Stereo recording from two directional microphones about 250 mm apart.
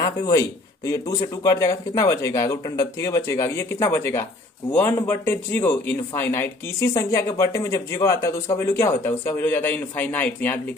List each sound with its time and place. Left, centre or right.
0.0 s speech: centre